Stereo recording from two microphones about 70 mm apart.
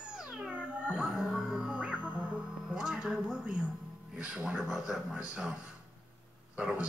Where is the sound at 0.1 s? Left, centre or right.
Centre.